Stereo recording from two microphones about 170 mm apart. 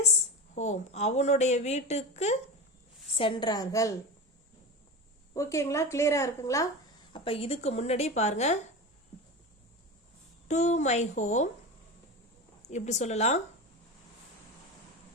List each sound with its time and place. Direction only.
0.5 s speech: 45° left (ahead or behind)
3.2 s a woman's voice: 30° left (ahead or behind)
5.3 s a woman's voice: 15° left (ahead or behind)
7.1 s speech: 30° left (ahead or behind)
10.5 s a woman's voice: 45° left (ahead or behind)
12.6 s speech: 40° left (ahead or behind)